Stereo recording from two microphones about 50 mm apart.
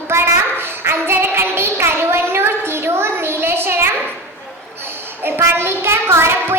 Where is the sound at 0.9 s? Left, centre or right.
Right.